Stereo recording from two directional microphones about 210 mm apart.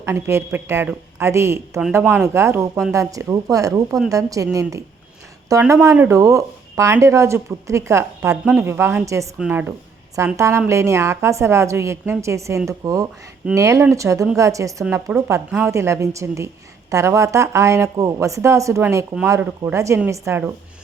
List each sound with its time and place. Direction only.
0.0 s speech: 10° right (ahead or behind)
5.5 s speech: 15° right (ahead or behind)